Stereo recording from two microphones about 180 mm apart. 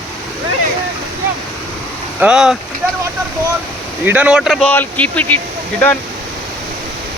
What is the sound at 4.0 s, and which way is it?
Speech, 10° right (ahead or behind).